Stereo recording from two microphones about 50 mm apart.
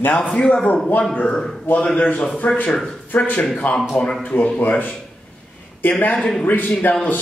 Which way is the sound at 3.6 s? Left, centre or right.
Left.